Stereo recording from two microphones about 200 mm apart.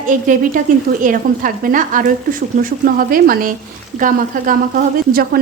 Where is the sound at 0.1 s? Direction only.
40° right (ahead or behind).